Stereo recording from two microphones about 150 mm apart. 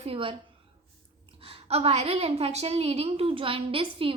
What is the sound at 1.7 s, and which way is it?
A woman's voice, 45° right (ahead or behind).